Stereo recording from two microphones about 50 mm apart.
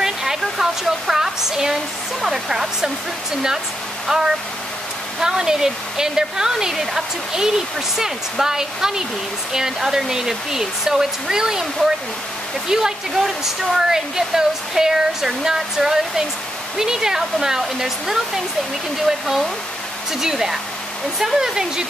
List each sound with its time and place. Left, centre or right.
0.0 s waterfall: centre
2.2 s speech: centre
4.1 s speech: centre